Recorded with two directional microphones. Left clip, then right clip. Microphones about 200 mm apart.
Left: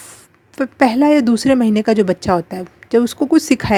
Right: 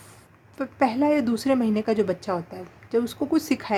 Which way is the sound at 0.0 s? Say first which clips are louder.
Left 9 dB; 30° left (ahead or behind).